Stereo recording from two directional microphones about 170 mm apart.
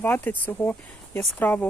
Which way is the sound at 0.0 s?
10° left (ahead or behind).